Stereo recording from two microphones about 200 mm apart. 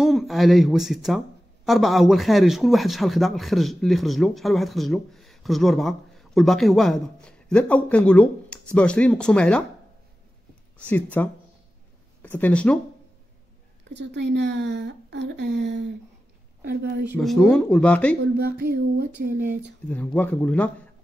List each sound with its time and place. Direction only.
0.0 s speech: centre (ahead or behind)
10.8 s speech: 10° left (ahead or behind)
13.8 s speech: 60° right (ahead or behind)
17.2 s speech: centre (ahead or behind)
18.6 s a sound: 50° right (ahead or behind)
19.9 s speech: 10° left (ahead or behind)